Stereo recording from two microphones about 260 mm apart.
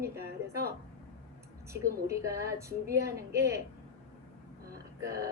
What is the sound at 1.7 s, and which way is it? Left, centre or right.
A woman's voice, centre.